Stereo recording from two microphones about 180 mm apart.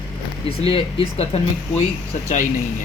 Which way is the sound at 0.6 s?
30° left (ahead or behind).